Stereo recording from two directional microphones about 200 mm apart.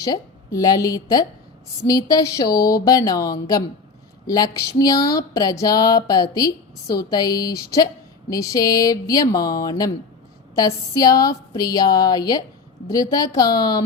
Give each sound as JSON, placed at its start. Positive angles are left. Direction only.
{"t": 0.0, "sound": "a woman's voice", "side_deg": 15}